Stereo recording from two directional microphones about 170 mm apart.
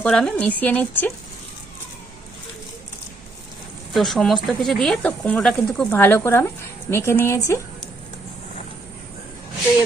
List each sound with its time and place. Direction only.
0.0 s speech: 5° left (ahead or behind)
3.9 s speech: centre (ahead or behind); by 7.6 s 15° left (ahead or behind)